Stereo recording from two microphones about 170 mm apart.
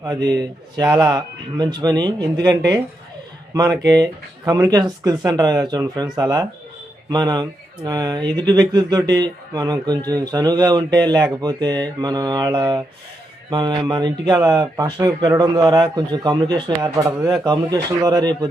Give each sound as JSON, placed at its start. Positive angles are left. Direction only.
{"t": 0.0, "sound": "speech", "side_deg": -20}
{"t": 3.5, "sound": "speech", "side_deg": -20}